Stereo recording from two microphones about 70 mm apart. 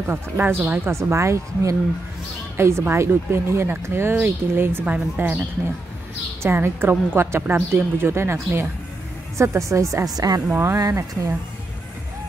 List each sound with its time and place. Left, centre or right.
0.0 s speech: right
0.9 s speech: right
4.8 s a woman's voice: centre
6.4 s speech: right
10.0 s a woman's voice: right
10.5 s speech: right